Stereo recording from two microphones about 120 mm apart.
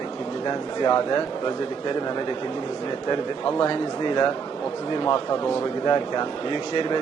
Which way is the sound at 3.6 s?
40° left (ahead or behind).